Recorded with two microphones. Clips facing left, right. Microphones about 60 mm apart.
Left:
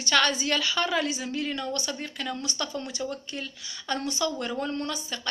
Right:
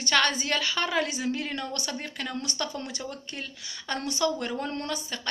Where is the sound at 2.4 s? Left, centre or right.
Right.